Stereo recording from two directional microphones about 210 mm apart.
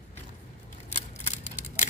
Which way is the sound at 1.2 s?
35° left (ahead or behind).